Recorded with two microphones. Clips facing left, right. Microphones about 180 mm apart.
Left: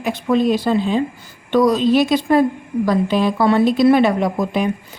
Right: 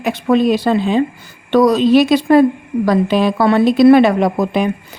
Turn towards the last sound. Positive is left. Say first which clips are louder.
# right 4 dB
turn(degrees=-70)  # may be behind; listen again after turning